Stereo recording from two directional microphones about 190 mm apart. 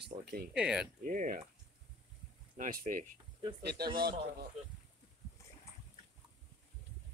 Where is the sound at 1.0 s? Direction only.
45° right (ahead or behind).